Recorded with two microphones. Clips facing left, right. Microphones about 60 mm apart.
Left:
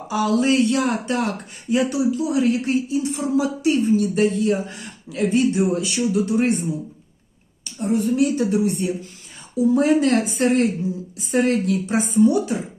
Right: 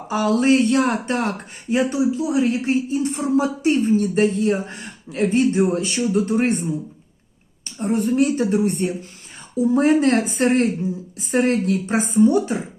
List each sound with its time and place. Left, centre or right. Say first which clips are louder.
0.1 s a man's voice: right 2 dB; right
7.6 s a man's voice: even; right